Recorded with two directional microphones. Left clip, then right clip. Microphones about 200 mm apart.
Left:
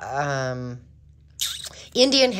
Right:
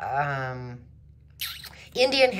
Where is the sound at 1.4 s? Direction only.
20° left (ahead or behind).